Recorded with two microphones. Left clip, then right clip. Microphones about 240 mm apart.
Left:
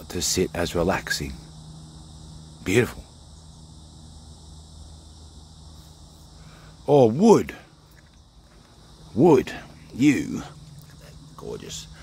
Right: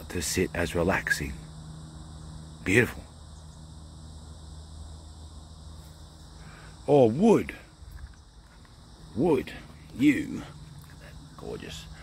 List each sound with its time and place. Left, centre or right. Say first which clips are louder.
0.0 s speech: left 4 dB; centre
2.6 s speech: left 2 dB; centre
6.9 s speech: left 4 dB; left
9.2 s speech: left 8 dB; left